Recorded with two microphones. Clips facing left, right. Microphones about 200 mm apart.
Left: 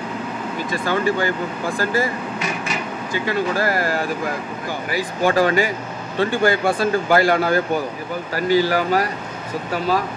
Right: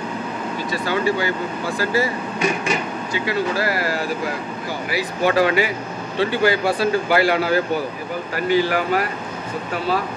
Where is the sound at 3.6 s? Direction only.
45° left (ahead or behind).